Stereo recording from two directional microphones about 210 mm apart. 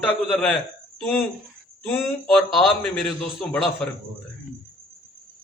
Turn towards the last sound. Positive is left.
turn(degrees=5)  # may be behind; listen again after turning